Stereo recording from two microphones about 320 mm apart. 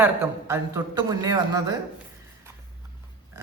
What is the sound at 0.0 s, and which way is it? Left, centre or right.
A man's voice, centre.